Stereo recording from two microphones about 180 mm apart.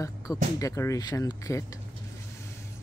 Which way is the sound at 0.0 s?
20° left (ahead or behind).